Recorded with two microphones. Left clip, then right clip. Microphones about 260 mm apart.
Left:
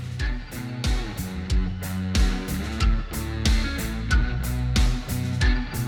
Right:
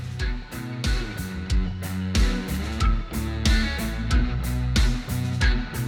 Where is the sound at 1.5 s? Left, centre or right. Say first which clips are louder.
Even; centre.